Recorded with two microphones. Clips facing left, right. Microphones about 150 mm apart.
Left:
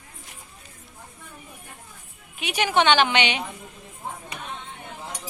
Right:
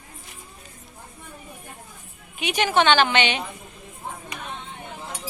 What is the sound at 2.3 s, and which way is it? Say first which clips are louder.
A woman's voice: right 1 dB; 5° left (ahead or behind).